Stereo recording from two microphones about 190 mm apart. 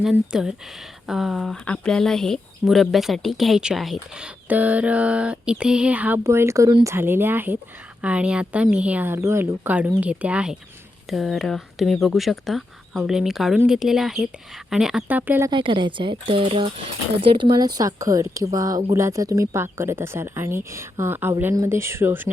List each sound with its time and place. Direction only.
0.0 s speech: 5° right (ahead or behind)
15.4 s speech: 25° right (ahead or behind)